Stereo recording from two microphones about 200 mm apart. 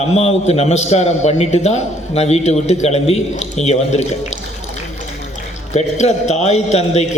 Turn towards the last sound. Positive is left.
turn(degrees=35)  # may be behind; listen again after turning